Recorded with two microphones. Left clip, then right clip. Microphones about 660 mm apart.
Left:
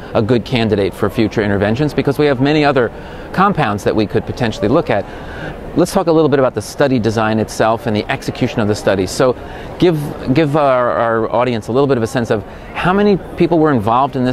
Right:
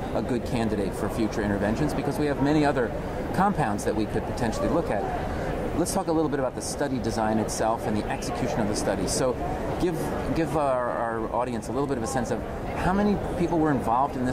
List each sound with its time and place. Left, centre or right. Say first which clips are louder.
0.1 s speech: left 15 dB; left